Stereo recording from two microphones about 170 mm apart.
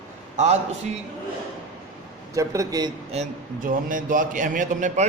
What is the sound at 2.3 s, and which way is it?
Speech, 20° right (ahead or behind).